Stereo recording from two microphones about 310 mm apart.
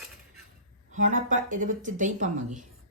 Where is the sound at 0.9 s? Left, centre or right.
Right.